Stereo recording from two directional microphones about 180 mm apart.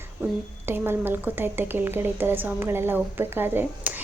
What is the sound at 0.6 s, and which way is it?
A woman's voice, 10° right (ahead or behind).